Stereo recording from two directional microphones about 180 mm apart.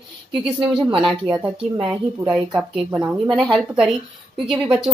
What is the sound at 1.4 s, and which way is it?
Speech, 10° right (ahead or behind).